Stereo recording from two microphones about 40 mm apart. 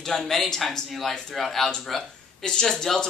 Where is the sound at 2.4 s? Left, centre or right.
Centre.